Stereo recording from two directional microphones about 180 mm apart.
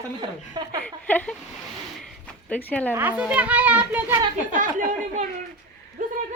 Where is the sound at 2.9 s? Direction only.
10° right (ahead or behind).